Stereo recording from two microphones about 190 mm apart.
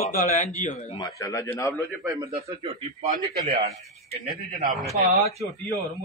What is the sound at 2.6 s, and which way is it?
Speech, 35° right (ahead or behind).